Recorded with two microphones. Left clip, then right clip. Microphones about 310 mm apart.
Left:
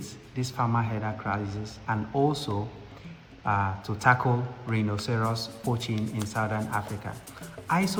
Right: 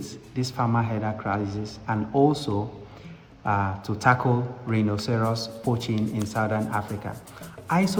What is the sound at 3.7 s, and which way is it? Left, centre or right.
A man's voice, right.